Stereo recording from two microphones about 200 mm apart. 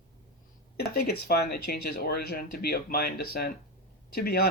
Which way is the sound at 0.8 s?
50° left (ahead or behind).